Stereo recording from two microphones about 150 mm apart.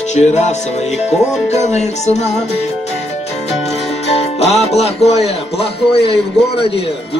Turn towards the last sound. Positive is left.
turn(degrees=40)  # may be behind; listen again after turning